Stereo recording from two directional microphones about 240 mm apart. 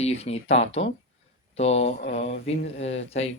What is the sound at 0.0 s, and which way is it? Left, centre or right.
Speech, left.